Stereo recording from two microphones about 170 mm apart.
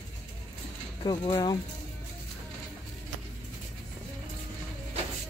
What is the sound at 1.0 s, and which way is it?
Speech, 25° left (ahead or behind).